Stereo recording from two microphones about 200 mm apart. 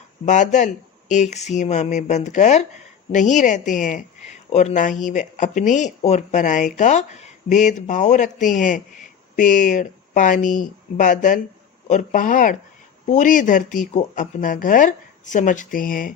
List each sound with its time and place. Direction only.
0.3 s speech: 35° left (ahead or behind)